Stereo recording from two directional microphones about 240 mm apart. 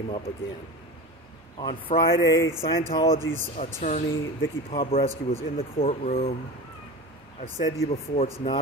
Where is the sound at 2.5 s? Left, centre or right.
Centre.